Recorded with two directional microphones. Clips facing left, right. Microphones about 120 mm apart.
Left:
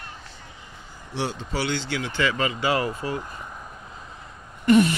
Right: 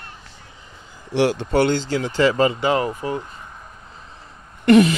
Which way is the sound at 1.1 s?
80° right.